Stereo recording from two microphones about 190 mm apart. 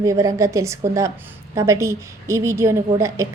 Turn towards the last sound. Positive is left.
turn(degrees=-15)  # may be behind; listen again after turning